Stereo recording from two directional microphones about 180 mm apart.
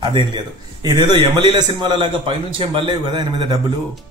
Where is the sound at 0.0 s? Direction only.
25° right (ahead or behind).